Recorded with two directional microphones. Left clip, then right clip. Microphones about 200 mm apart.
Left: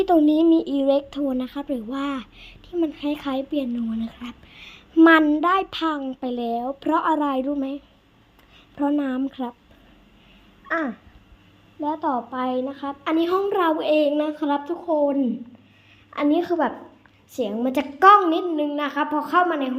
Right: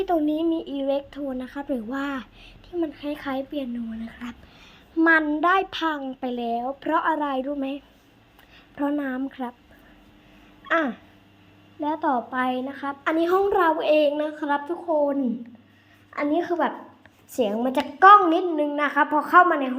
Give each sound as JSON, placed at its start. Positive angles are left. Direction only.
{"t": 0.0, "sound": "speech", "side_deg": 35}
{"t": 1.7, "sound": "speech", "side_deg": 10}
{"t": 4.2, "sound": "a sound", "side_deg": 10}
{"t": 4.9, "sound": "speech", "side_deg": 35}
{"t": 5.4, "sound": "speech", "side_deg": 10}
{"t": 8.7, "sound": "speech", "side_deg": 15}
{"t": 10.7, "sound": "a woman's voice", "side_deg": 5}
{"t": 14.2, "sound": "speech", "side_deg": 25}
{"t": 17.3, "sound": "a woman's voice", "side_deg": -5}
{"t": 17.6, "sound": "speech", "side_deg": 25}
{"t": 18.5, "sound": "a woman's voice", "side_deg": 5}